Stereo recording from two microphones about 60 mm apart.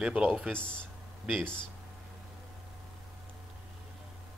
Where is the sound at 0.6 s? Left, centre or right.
Centre.